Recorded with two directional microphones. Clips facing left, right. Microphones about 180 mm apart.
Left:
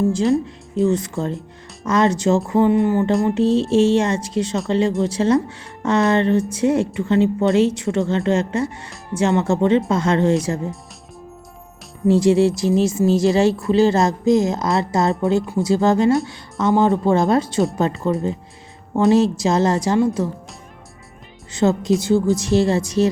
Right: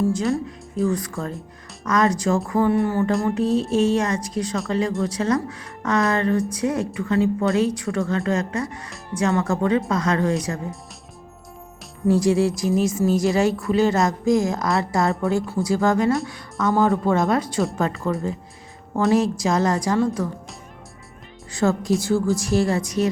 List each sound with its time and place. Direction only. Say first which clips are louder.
0.0 s a woman's voice: left 4 dB; 30° left (ahead or behind)
12.0 s a woman's voice: left 4 dB; 25° left (ahead or behind)
21.5 s a woman's voice: left 3 dB; 20° left (ahead or behind)